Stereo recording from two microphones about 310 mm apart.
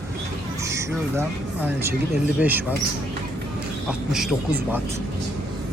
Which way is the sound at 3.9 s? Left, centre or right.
Centre.